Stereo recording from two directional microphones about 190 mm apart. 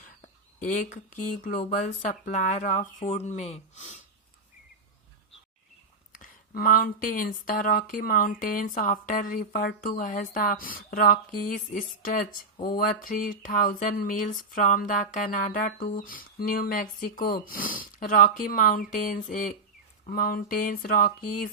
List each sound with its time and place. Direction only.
0.6 s speech: 45° left (ahead or behind)
6.1 s speech: 45° left (ahead or behind)